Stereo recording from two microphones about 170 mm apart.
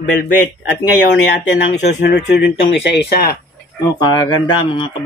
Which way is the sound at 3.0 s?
65° left (ahead or behind).